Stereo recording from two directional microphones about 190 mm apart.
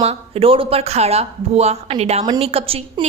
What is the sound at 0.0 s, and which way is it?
A woman's voice, 30° right (ahead or behind).